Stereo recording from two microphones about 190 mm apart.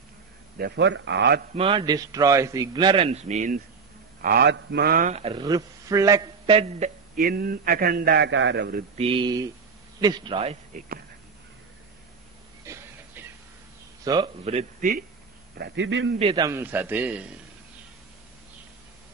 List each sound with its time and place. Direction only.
0.6 s speech: 65° right (ahead or behind)
1.5 s a man's voice: 30° right (ahead or behind)
4.2 s a man's voice: 55° right (ahead or behind); by 6.9 s 30° right (ahead or behind)
7.2 s a man's voice: 50° right (ahead or behind)
8.9 s a man's voice: 30° right (ahead or behind)
12.7 s a sound: 15° right (ahead or behind)
14.0 s a man's voice: 25° right (ahead or behind)
15.5 s speech: 60° right (ahead or behind); by 16.2 s 85° right
16.2 s a man's voice: 30° right (ahead or behind)
16.4 s a man's voice: 10° right (ahead or behind)